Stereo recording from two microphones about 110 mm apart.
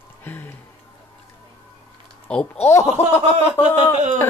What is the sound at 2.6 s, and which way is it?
Speech, 25° left (ahead or behind).